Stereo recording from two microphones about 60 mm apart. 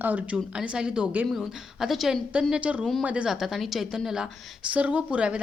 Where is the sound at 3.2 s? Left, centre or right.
Centre.